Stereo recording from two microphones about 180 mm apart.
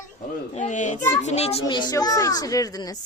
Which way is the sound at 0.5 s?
40° left (ahead or behind).